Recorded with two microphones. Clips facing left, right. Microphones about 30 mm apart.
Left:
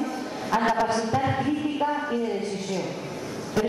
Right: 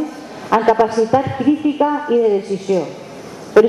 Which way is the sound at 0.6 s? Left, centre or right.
Centre.